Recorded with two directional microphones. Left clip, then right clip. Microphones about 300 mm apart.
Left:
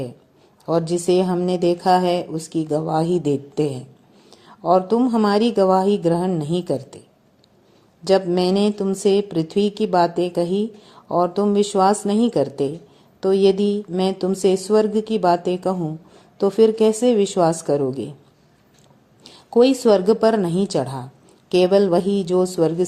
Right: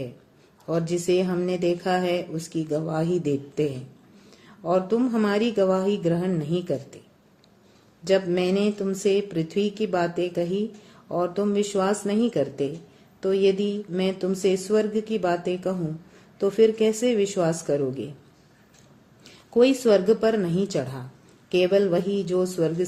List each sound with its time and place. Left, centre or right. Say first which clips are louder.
0.6 s a woman's voice: left 6 dB; centre
8.0 s a woman's voice: left 5 dB; centre
19.5 s a woman's voice: left 4 dB; left